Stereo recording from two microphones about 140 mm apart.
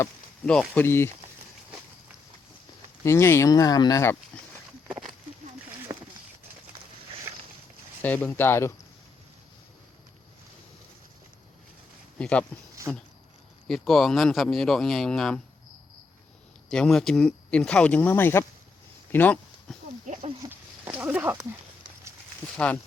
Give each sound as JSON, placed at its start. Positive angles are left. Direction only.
{"t": 0.7, "sound": "speech", "side_deg": 15}
{"t": 3.0, "sound": "speech", "side_deg": 20}
{"t": 5.9, "sound": "clip-clop", "side_deg": -30}
{"t": 8.0, "sound": "speech", "side_deg": 10}
{"t": 12.2, "sound": "speech", "side_deg": 5}
{"t": 13.7, "sound": "speech", "side_deg": 0}
{"t": 16.6, "sound": "speech", "side_deg": 5}
{"t": 19.1, "sound": "a sound", "side_deg": 10}
{"t": 20.5, "sound": "a sound", "side_deg": -15}
{"t": 22.5, "sound": "speech", "side_deg": 10}